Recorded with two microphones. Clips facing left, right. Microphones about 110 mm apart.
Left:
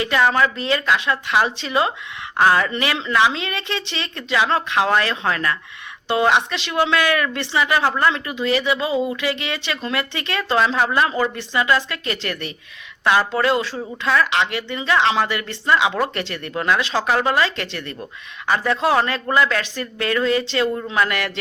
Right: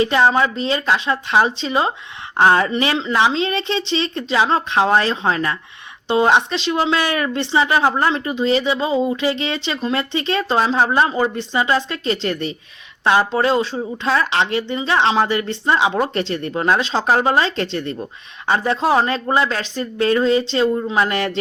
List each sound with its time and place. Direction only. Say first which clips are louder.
0.0 s a woman's voice: right 2 dB; 30° right (ahead or behind)